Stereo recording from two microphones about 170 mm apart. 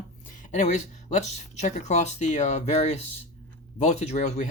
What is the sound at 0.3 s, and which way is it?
Speech, 45° left (ahead or behind).